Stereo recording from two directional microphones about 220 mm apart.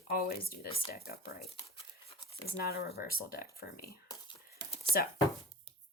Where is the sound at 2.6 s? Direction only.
45° left (ahead or behind).